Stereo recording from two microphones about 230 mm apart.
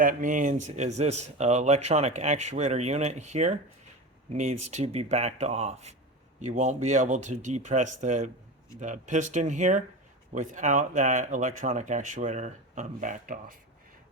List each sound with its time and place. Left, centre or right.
0.0 s speech: right